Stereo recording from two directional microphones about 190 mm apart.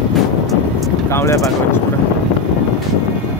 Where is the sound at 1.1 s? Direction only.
15° left (ahead or behind).